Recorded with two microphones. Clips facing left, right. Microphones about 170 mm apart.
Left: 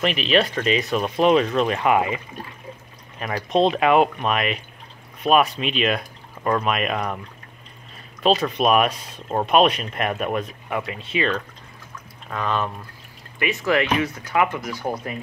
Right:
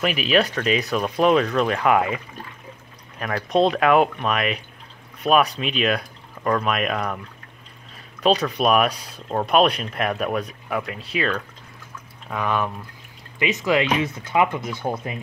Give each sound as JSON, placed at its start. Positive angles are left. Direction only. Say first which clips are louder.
{"t": 0.0, "sound": "speech", "louder": "even", "side_deg": -5}
{"t": 8.2, "sound": "speech", "louder": "even", "side_deg": 0}